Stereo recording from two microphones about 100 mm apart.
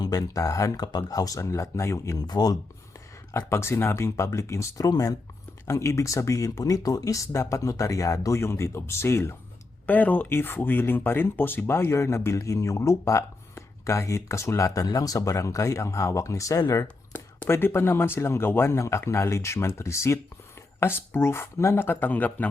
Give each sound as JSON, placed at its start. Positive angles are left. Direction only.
{"t": 0.0, "sound": "speech", "side_deg": 40}
{"t": 2.1, "sound": "speech", "side_deg": 45}
{"t": 3.3, "sound": "speech", "side_deg": 25}
{"t": 17.1, "sound": "speech", "side_deg": 20}